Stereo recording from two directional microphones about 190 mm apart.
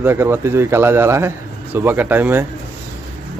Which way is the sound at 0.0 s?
10° right (ahead or behind).